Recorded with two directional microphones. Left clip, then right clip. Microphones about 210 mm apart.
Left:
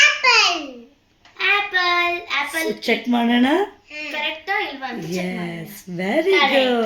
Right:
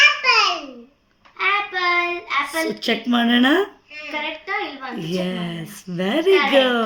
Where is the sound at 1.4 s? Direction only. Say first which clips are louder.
Left 2 dB; 10° right (ahead or behind).